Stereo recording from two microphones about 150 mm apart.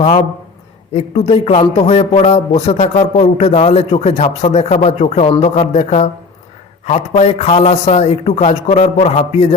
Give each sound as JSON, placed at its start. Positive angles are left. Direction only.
{"t": 0.9, "sound": "a man's voice", "side_deg": 45}